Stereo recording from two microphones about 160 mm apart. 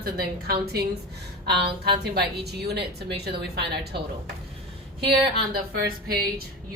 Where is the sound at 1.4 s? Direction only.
90° right.